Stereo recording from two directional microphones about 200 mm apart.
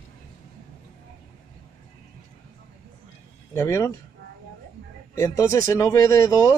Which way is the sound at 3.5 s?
15° left (ahead or behind).